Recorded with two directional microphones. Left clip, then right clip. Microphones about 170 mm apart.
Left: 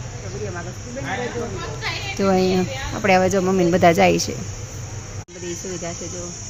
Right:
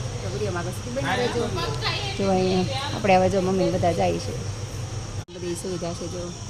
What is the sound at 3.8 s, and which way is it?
Speech, 40° left (ahead or behind).